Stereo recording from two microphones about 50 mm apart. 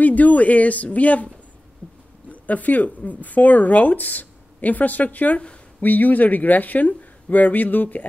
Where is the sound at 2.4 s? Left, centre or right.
Left.